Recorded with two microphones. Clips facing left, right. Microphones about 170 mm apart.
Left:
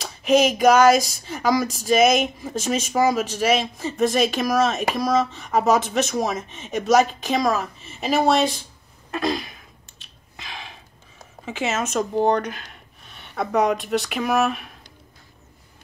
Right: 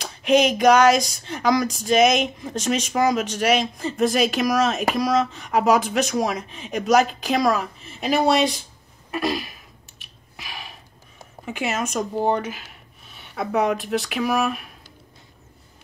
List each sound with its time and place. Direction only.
0.0 s speech: 5° left (ahead or behind)
12.2 s speech: 5° right (ahead or behind)